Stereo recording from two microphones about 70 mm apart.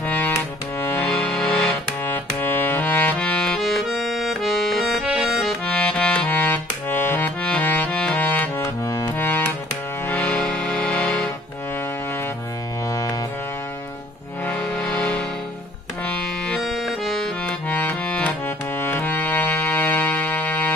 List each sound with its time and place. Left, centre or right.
0.0 s music: left
0.7 s music: left
1.0 s music: centre
2.0 s accordion: left; by 5.6 s centre
5.7 s accordion: centre; by 7.2 s left
7.4 s accordion: left
8.6 s music: left
9.2 s music: left
14.4 s music: left
16.5 s accordion: centre
17.6 s accordion: left
18.8 s music: left